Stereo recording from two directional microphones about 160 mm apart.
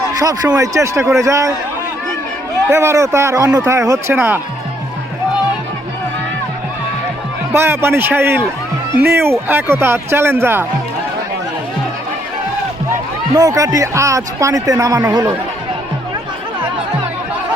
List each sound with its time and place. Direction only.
0.1 s a sound: 20° right (ahead or behind)
0.5 s speech: 20° right (ahead or behind)
2.6 s speech: 15° right (ahead or behind)
7.5 s speech: 15° right (ahead or behind)
13.3 s speech: 20° right (ahead or behind)